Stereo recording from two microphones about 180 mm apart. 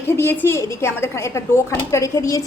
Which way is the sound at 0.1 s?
10° left (ahead or behind).